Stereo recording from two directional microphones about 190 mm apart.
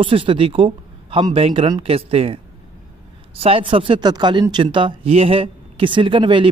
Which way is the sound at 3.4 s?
30° right (ahead or behind).